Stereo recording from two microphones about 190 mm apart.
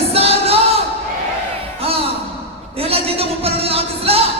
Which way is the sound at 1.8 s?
30° right (ahead or behind).